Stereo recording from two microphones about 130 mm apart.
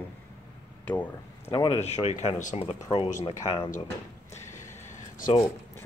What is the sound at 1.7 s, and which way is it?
Speech, 55° left (ahead or behind).